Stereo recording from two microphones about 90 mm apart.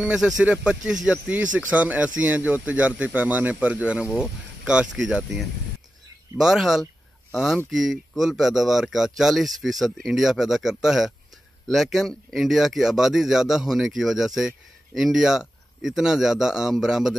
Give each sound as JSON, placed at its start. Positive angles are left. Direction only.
{"t": 0.0, "sound": "speech", "side_deg": -10}